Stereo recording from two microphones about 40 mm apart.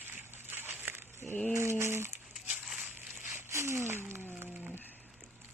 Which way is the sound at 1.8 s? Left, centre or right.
Right.